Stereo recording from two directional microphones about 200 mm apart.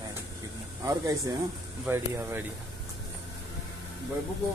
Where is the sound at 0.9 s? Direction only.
15° right (ahead or behind).